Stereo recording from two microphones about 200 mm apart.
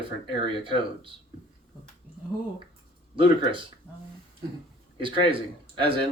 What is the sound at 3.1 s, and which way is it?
Speech, 25° right (ahead or behind).